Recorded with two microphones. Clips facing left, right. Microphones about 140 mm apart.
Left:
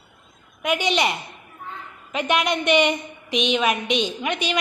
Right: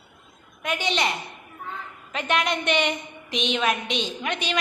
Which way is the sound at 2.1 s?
10° left (ahead or behind).